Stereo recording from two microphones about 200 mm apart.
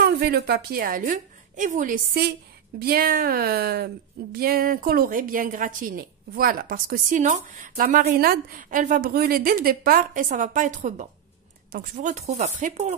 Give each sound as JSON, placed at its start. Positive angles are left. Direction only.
{"t": 0.0, "sound": "a woman's voice", "side_deg": -55}